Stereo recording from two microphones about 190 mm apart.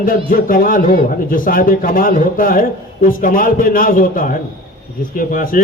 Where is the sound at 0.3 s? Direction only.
45° left (ahead or behind).